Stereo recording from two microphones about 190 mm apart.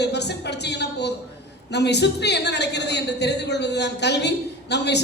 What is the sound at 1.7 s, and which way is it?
A woman's voice, 65° left (ahead or behind).